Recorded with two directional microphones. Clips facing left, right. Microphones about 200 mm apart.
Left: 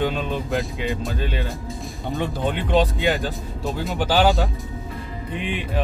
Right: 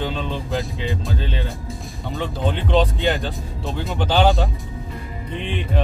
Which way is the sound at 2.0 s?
15° left (ahead or behind).